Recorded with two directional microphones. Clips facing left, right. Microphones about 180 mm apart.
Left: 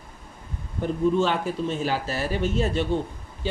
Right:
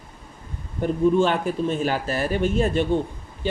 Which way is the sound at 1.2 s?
55° right (ahead or behind).